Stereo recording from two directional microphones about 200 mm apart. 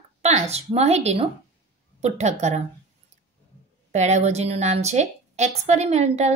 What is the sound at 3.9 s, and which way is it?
A woman's voice, 35° right (ahead or behind).